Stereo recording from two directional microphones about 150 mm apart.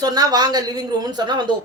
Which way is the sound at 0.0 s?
25° right (ahead or behind).